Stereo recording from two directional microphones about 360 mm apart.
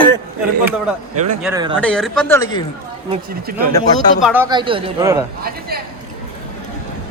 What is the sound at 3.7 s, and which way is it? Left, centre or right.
A man's voice, centre.